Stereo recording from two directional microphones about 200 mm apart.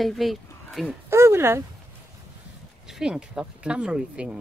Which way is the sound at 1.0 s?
15° right (ahead or behind).